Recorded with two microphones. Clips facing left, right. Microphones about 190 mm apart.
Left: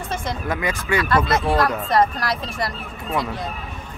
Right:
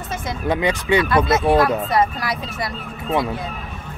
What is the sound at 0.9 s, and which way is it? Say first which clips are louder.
Speech: right 4 dB; 20° right (ahead or behind).